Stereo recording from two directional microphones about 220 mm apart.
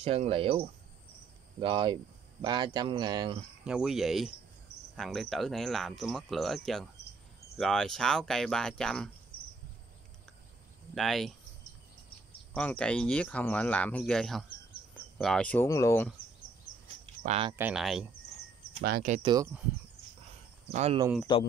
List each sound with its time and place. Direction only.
0.0 s speech: 25° right (ahead or behind)
1.6 s speech: 20° right (ahead or behind)
3.6 s cricket: 5° right (ahead or behind)
11.0 s cricket: centre (ahead or behind)
12.5 s cricket: 5° left (ahead or behind)
15.1 s speech: 5° left (ahead or behind)
16.8 s a sound: 30° right (ahead or behind)
17.6 s cricket: 5° right (ahead or behind)
18.8 s speech: 45° right (ahead or behind)
19.2 s speech: 15° right (ahead or behind)
20.7 s speech: 30° right (ahead or behind)
21.3 s speech: 20° left (ahead or behind)